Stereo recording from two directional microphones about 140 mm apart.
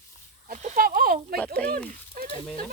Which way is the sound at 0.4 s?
60° right (ahead or behind).